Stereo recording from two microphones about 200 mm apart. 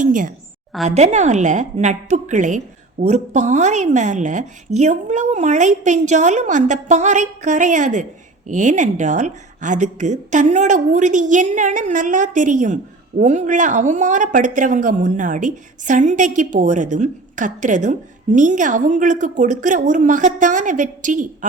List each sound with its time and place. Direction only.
0.0 s a woman's voice: 40° right (ahead or behind)